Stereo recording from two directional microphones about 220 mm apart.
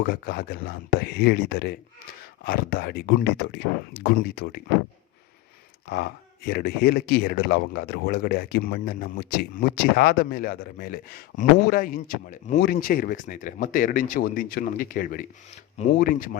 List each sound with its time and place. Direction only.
0.0 s speech: 45° left (ahead or behind)
5.9 s speech: 45° left (ahead or behind)